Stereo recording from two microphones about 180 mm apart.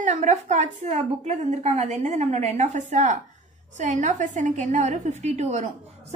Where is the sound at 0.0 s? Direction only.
45° right (ahead or behind).